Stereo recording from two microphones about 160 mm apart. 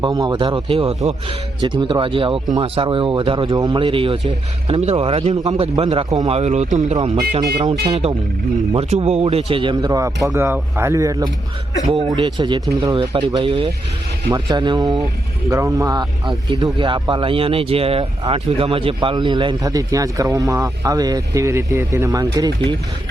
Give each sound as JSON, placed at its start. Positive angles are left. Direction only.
{"t": 0.0, "sound": "speech", "side_deg": -25}
{"t": 11.9, "sound": "speech", "side_deg": -30}